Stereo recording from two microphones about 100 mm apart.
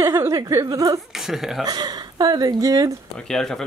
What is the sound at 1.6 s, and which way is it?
Speech, 45° right (ahead or behind).